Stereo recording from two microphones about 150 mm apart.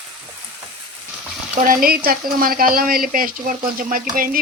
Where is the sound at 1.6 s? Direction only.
70° right (ahead or behind).